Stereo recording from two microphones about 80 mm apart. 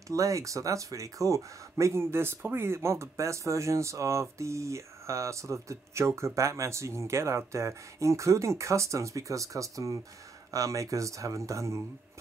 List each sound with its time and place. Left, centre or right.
0.1 s speech: right